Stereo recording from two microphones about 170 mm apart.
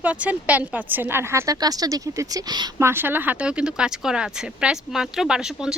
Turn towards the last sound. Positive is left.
turn(degrees=-5)  # may be behind; listen again after turning